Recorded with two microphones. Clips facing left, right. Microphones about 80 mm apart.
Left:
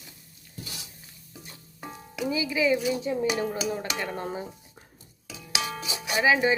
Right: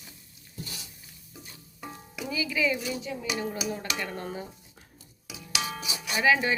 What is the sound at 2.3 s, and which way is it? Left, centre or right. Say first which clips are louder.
Speech: left 3 dB; left.